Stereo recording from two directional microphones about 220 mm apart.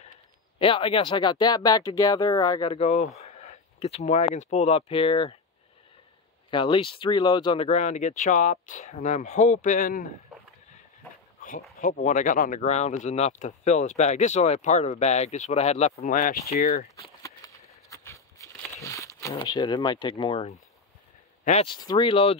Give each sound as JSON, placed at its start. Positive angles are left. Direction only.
{"t": 0.6, "sound": "speech", "side_deg": 25}
{"t": 6.5, "sound": "speech", "side_deg": 20}
{"t": 11.8, "sound": "speech", "side_deg": 35}
{"t": 17.2, "sound": "a sound", "side_deg": 15}
{"t": 21.5, "sound": "speech", "side_deg": 25}